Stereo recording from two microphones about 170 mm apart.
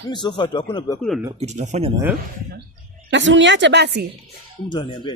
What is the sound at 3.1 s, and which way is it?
Speech, 90° right.